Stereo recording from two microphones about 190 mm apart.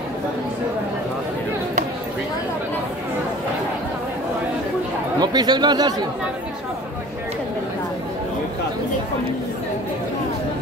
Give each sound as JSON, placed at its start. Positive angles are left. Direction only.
{"t": 5.2, "sound": "speech", "side_deg": -20}